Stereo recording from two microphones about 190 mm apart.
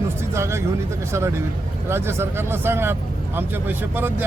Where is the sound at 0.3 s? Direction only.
15° right (ahead or behind).